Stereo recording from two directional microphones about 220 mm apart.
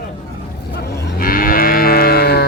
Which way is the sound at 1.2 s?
40° left (ahead or behind).